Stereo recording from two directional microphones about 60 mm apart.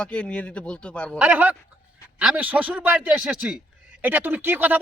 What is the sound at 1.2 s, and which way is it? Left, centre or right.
Speech, right.